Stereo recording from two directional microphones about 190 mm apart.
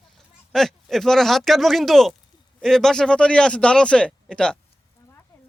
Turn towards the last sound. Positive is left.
turn(degrees=5)  # may be behind; listen again after turning